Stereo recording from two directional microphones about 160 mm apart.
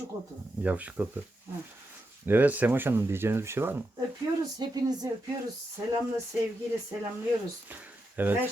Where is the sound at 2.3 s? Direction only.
10° right (ahead or behind).